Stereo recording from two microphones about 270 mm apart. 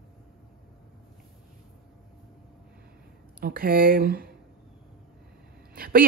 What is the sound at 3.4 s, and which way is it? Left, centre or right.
Speech, right.